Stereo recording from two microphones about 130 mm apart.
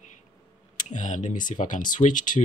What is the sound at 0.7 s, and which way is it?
Speech, 70° left (ahead or behind).